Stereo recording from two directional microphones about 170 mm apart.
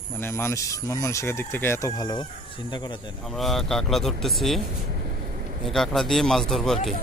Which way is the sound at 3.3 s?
Centre (ahead or behind).